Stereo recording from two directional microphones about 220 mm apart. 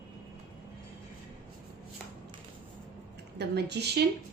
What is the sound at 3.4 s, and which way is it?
Speech, 50° right (ahead or behind).